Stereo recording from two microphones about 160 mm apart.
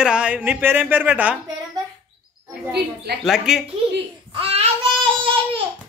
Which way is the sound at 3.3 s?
5° right (ahead or behind).